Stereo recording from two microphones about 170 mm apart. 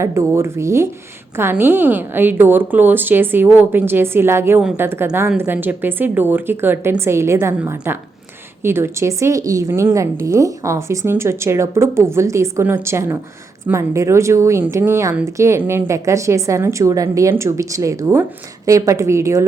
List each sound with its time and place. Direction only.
0.0 s a woman's voice: 15° right (ahead or behind)